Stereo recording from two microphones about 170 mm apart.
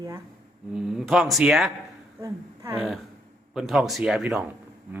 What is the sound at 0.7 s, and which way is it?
Speech, 5° right (ahead or behind).